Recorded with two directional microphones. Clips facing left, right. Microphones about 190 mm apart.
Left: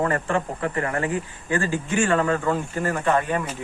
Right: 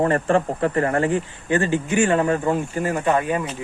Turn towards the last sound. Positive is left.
turn(degrees=-10)  # may be behind; listen again after turning